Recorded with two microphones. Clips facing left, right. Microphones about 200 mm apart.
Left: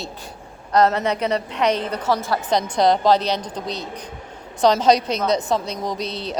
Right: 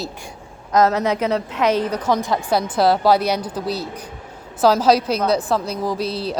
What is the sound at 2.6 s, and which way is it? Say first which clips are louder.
A woman's voice: even; 5° right (ahead or behind).